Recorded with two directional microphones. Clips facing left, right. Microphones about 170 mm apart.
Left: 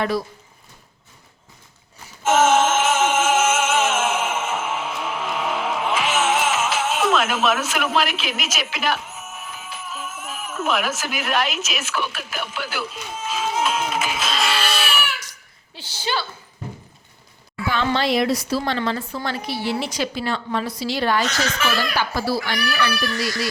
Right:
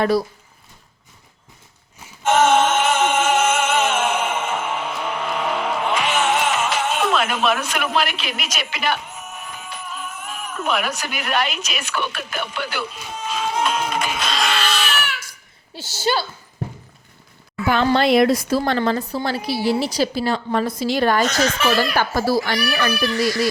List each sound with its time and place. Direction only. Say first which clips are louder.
0.0 s a woman's voice: right 4 dB; 35° right (ahead or behind)
2.2 s music: right 1 dB; 5° left (ahead or behind)
15.7 s a woman's voice: right 5 dB; 40° right (ahead or behind)
17.8 s speech: right 5 dB; 50° right (ahead or behind)
18.8 s a woman's voice: right 4 dB; 40° right (ahead or behind)